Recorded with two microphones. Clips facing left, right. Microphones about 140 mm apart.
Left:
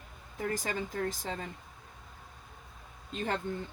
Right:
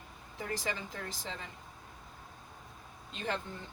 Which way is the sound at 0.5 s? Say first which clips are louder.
Left 1 dB; 45° left (ahead or behind).